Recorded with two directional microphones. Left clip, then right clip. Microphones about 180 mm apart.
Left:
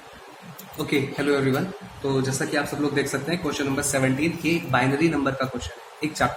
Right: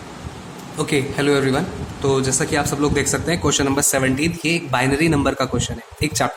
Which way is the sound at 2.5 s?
55° right (ahead or behind).